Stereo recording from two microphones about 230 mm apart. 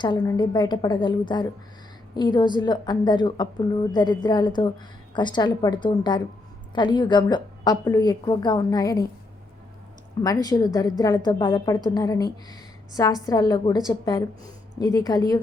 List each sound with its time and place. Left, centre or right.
0.0 s a woman's voice: centre
10.2 s a woman's voice: centre